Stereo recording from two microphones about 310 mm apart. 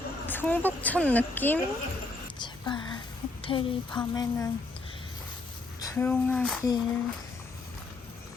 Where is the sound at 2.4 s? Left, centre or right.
Centre.